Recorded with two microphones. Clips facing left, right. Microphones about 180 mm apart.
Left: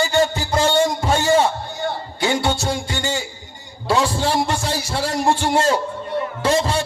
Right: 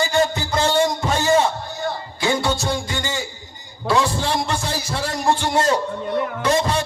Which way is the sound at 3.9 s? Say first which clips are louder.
Left 1 dB; 30° left (ahead or behind).